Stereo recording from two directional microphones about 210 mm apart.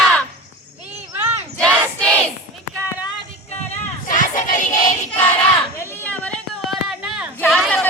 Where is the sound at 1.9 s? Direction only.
5° left (ahead or behind).